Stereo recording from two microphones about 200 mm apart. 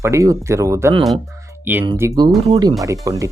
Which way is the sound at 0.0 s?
15° right (ahead or behind).